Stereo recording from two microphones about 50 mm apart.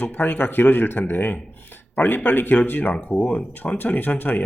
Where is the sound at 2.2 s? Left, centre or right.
Left.